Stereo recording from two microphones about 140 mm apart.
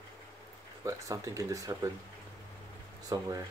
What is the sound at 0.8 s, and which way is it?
Speech, 25° right (ahead or behind).